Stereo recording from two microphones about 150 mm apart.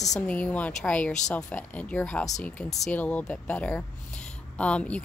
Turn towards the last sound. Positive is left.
turn(degrees=5)  # may be behind; listen again after turning